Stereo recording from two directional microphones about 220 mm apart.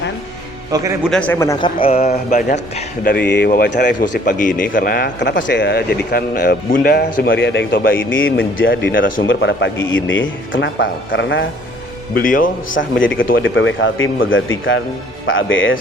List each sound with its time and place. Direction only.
0.7 s a man's voice: 15° right (ahead or behind)
1.1 s a man's voice: 5° left (ahead or behind); by 2.6 s 30° left (ahead or behind)
3.0 s speech: 45° left (ahead or behind)
12.1 s a man's voice: 40° left (ahead or behind)
13.1 s speech: 60° left (ahead or behind)